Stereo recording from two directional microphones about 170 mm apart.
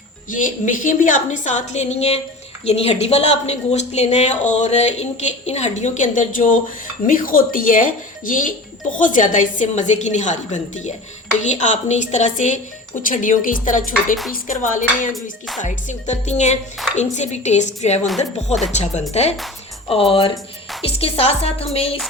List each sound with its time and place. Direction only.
0.3 s a woman's voice: 50° left (ahead or behind)
15.1 s music: centre (ahead or behind)
15.6 s a woman's voice: 45° left (ahead or behind)